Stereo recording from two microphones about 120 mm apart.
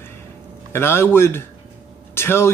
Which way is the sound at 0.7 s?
20° left (ahead or behind).